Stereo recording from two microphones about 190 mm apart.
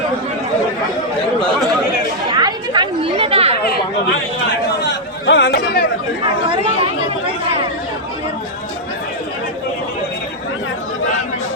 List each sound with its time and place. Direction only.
2.3 s chatter: 25° right (ahead or behind)
4.8 s chatter: 65° left (ahead or behind)